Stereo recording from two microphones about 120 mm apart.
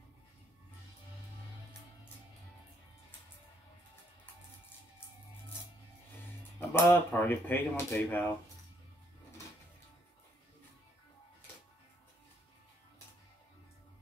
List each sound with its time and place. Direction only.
6.7 s speech: 20° left (ahead or behind)